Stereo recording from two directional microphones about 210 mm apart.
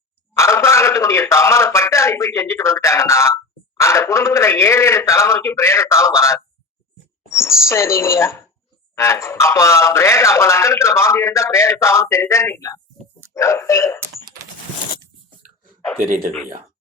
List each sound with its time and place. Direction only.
0.3 s a man's voice: 15° left (ahead or behind)
7.3 s a sound: 15° left (ahead or behind)
7.7 s a man's voice: 15° left (ahead or behind)
16.0 s speech: 40° right (ahead or behind)